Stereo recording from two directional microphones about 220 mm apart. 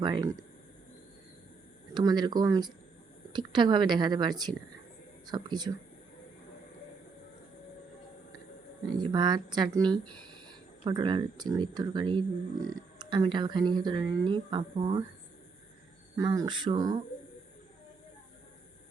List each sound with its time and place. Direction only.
0.0 s speech: 15° right (ahead or behind)
1.9 s speech: 20° right (ahead or behind)
9.0 s speech: 20° right (ahead or behind)
16.1 s speech: 15° right (ahead or behind)